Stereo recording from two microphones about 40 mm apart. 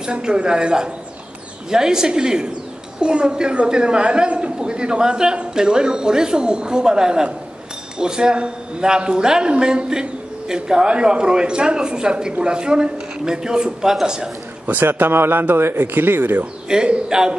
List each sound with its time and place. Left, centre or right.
0.0 s a man's voice: right
14.7 s speech: right
16.6 s a man's voice: right